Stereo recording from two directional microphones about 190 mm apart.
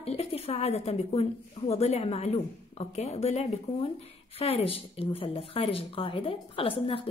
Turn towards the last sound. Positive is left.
turn(degrees=30)  # may be behind; listen again after turning